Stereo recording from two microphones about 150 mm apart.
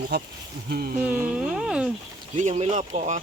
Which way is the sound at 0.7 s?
90° right.